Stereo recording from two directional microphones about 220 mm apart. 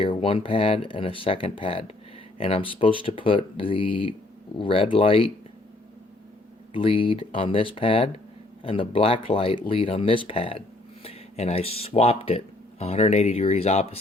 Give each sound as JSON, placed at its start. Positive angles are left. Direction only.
{"t": 0.0, "sound": "speech", "side_deg": 25}
{"t": 6.7, "sound": "speech", "side_deg": 25}